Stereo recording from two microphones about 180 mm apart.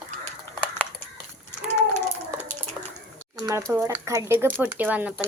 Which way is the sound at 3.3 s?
15° right (ahead or behind).